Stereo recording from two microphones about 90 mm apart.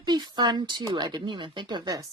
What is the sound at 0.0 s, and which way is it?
A woman's voice, 50° right (ahead or behind).